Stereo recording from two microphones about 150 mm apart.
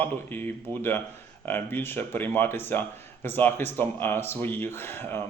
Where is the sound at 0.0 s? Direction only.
15° left (ahead or behind).